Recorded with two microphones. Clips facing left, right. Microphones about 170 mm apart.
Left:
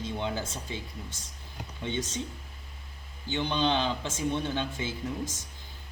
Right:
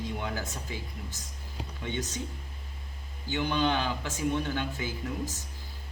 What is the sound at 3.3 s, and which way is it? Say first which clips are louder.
A man's voice: even; 25° left (ahead or behind).